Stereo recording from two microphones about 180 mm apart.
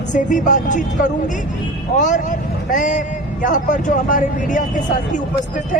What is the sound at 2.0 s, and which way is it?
Speech, 45° left (ahead or behind).